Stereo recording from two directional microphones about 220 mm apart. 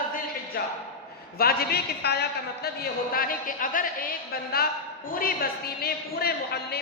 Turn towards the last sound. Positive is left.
turn(degrees=45)  # may be behind; listen again after turning